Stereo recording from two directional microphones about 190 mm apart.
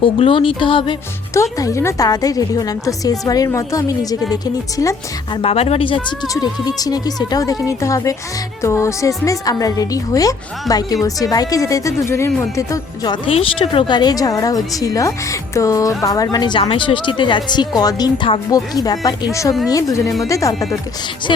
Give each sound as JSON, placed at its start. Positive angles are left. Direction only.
{"t": 0.0, "sound": "a woman's voice", "side_deg": 25}
{"t": 5.4, "sound": "a woman's voice", "side_deg": 30}